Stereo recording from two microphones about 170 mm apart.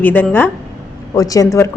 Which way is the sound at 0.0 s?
10° left (ahead or behind).